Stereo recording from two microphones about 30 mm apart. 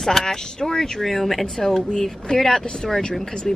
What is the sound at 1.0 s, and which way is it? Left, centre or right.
Speech, centre.